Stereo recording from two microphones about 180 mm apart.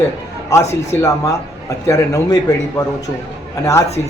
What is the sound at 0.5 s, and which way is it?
Speech, 15° left (ahead or behind).